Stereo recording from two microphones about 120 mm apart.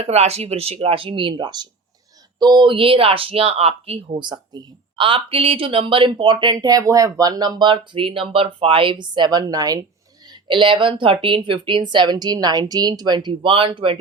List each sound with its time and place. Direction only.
0.0 s speech: 60° right (ahead or behind); by 9.8 s 30° right (ahead or behind)
10.2 s speech: 45° right (ahead or behind)